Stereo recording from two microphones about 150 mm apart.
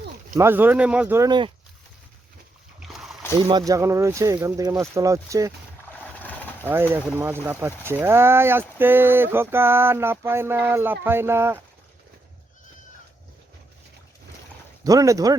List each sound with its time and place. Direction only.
0.3 s speech: 15° right (ahead or behind)
1.2 s speech: 30° right (ahead or behind)
2.8 s boat: centre (ahead or behind)
3.7 s speech: 20° right (ahead or behind)
6.0 s a sound: 10° left (ahead or behind)
6.7 s speech: 15° right (ahead or behind)
14.8 s speech: 20° right (ahead or behind)